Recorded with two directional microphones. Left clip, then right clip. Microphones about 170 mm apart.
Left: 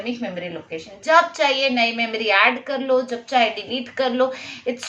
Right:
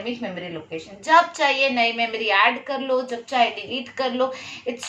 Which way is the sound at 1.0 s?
25° left (ahead or behind).